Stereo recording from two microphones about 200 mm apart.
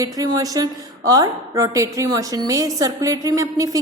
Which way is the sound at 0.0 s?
20° right (ahead or behind).